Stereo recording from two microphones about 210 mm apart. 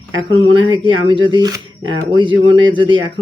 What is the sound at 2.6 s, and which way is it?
Speech, 20° right (ahead or behind).